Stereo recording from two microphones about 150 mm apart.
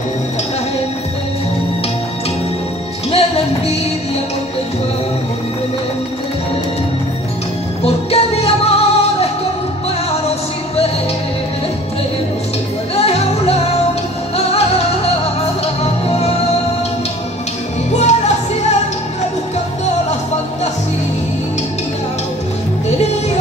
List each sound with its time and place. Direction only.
3.1 s music: 45° left (ahead or behind)
7.8 s music: 40° left (ahead or behind)
12.9 s music: 45° left (ahead or behind)
14.3 s music of latin america: 45° left (ahead or behind)
15.8 s music: 45° left (ahead or behind)
17.9 s music: 50° left (ahead or behind)